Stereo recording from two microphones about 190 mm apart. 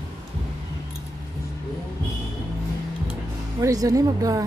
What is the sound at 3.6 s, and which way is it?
Speech, 20° right (ahead or behind).